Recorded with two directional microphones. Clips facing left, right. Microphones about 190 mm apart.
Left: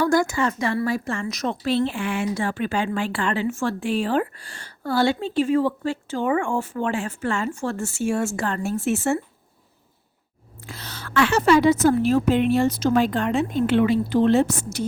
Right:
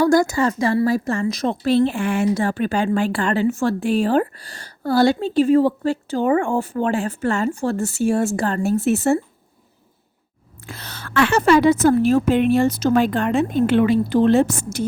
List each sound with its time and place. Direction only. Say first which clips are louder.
0.0 s a woman's voice: right 4 dB; 40° right (ahead or behind)
10.7 s a woman's voice: right 2 dB; 55° right (ahead or behind)